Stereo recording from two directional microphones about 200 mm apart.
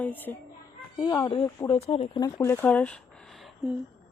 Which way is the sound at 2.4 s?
10° left (ahead or behind).